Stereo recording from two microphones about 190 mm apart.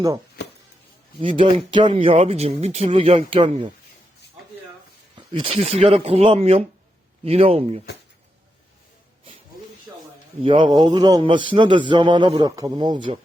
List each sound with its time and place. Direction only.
0.4 s music: 60° left (ahead or behind)
1.2 s a man's voice: 25° right (ahead or behind)
5.1 s speech: 25° right (ahead or behind)
10.4 s a man's voice: 25° right (ahead or behind)